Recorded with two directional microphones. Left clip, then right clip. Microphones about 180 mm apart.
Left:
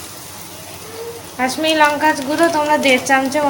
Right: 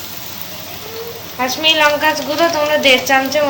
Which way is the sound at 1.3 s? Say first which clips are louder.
Right 1 dB; 25° left (ahead or behind).